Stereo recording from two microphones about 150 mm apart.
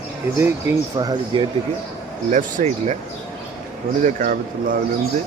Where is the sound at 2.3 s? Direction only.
55° right (ahead or behind).